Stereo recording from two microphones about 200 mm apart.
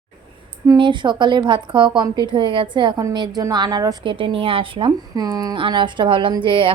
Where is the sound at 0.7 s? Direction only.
25° right (ahead or behind).